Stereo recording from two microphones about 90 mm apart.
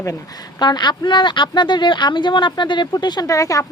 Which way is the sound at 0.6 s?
55° left (ahead or behind).